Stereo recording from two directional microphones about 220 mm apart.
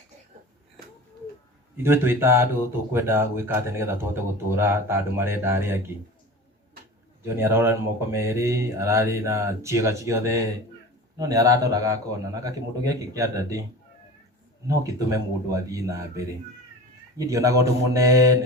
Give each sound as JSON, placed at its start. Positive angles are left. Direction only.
{"t": 1.7, "sound": "speech", "side_deg": -10}
{"t": 7.3, "sound": "speech", "side_deg": -10}
{"t": 14.7, "sound": "speech", "side_deg": -15}